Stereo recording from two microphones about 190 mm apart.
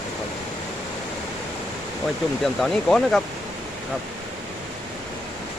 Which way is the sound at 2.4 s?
Centre (ahead or behind).